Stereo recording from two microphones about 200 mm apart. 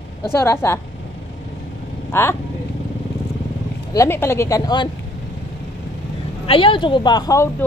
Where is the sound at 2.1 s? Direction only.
10° left (ahead or behind).